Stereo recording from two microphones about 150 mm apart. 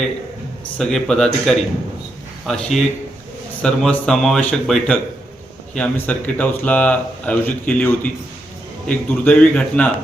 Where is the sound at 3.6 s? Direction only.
5° left (ahead or behind).